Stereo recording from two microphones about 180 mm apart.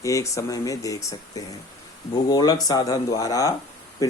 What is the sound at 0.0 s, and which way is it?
Speech, 15° left (ahead or behind).